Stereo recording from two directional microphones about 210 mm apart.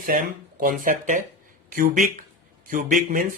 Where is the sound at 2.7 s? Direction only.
40° right (ahead or behind).